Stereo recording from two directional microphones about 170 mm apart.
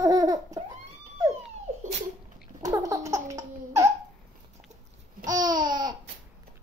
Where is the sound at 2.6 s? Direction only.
20° right (ahead or behind).